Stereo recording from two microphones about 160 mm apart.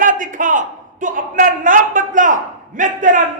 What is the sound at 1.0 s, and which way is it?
A man's voice, 55° right (ahead or behind).